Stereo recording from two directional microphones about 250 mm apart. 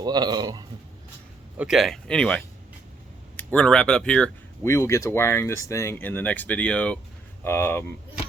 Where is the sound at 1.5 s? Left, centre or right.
Centre.